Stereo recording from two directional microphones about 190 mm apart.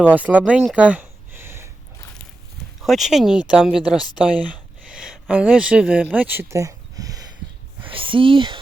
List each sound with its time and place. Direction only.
0.0 s speech: 10° right (ahead or behind)
2.8 s speech: centre (ahead or behind); by 8.5 s 25° right (ahead or behind)